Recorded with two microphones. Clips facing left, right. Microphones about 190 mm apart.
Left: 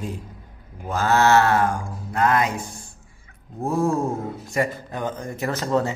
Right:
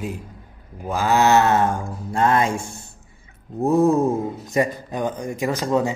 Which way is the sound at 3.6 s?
20° right (ahead or behind).